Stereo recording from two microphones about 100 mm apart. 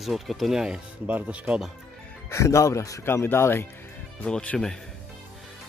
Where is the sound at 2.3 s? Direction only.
30° left (ahead or behind).